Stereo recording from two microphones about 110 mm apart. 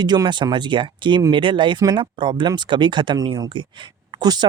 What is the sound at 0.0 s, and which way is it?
Speech, 40° right (ahead or behind).